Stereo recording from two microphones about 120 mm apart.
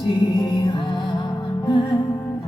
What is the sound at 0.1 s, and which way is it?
Music, 40° left (ahead or behind).